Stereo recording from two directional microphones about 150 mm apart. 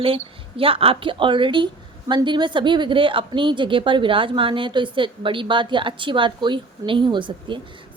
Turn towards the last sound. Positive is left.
turn(degrees=-35)  # may be behind; listen again after turning